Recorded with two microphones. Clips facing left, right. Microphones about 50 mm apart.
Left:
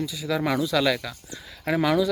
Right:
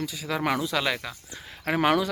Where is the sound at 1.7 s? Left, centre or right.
Right.